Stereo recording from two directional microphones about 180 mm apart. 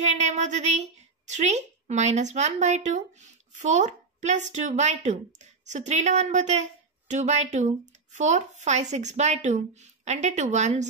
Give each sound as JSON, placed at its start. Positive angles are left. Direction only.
{"t": 0.0, "sound": "speech", "side_deg": -40}